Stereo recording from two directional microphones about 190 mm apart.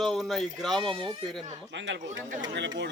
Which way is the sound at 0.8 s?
25° right (ahead or behind).